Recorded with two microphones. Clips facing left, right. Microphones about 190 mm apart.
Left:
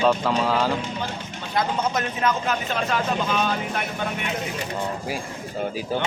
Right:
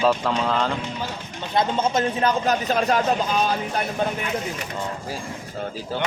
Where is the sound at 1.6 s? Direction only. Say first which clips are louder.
Right 3 dB; 30° right (ahead or behind).